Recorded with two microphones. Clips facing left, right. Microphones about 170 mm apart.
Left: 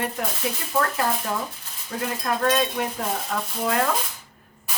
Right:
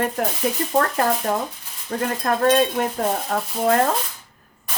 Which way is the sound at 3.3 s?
40° right (ahead or behind).